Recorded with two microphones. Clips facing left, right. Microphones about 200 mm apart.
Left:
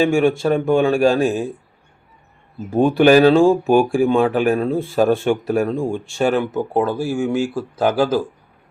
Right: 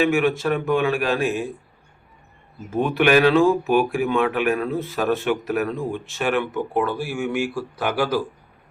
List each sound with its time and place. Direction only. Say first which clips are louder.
0.0 s speech: left 4 dB; 30° left (ahead or behind)
2.7 s speech: left 6 dB; 30° left (ahead or behind)
7.3 s speech: left 4 dB; 25° left (ahead or behind)